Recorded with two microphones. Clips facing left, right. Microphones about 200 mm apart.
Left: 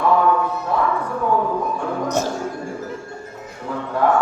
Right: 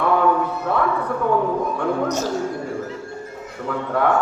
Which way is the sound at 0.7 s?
65° right (ahead or behind).